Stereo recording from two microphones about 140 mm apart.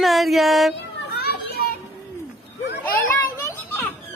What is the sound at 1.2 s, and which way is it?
Children playing, 90° left.